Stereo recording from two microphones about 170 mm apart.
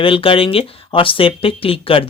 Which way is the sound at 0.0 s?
30° left (ahead or behind).